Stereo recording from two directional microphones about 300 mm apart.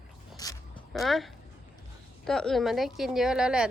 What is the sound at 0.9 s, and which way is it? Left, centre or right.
Speech, centre.